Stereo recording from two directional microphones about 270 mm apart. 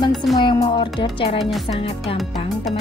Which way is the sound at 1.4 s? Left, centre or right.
Centre.